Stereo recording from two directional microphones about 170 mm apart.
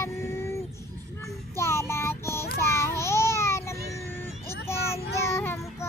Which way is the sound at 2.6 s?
15° left (ahead or behind).